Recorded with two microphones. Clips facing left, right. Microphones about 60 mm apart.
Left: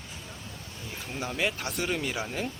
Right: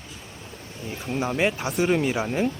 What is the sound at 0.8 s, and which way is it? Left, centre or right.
Speech, right.